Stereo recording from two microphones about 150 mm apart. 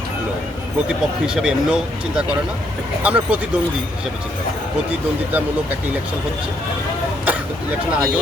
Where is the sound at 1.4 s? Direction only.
5° right (ahead or behind).